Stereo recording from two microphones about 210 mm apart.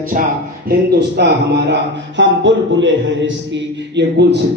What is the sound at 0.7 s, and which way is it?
A man's voice, 50° right (ahead or behind).